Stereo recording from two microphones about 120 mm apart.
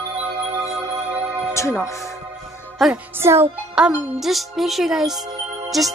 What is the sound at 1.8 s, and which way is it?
Speech, 25° left (ahead or behind).